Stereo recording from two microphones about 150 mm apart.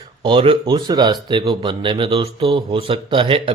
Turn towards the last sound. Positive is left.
turn(degrees=-35)  # may be behind; listen again after turning